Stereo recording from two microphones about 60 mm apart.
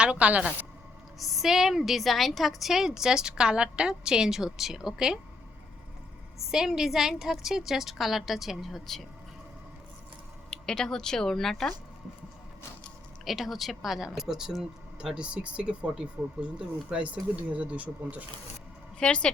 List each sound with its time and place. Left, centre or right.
0.0 s speech: right
1.2 s a woman's voice: centre
6.5 s a woman's voice: centre
10.5 s a woman's voice: centre
13.2 s a woman's voice: centre; by 18.2 s right
18.9 s a woman's voice: centre